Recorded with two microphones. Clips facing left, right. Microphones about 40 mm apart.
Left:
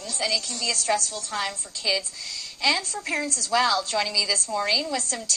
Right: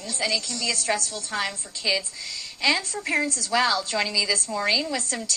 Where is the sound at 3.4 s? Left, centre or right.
Right.